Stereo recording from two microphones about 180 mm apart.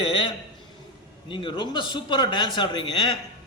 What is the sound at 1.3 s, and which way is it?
A man's voice, 25° left (ahead or behind).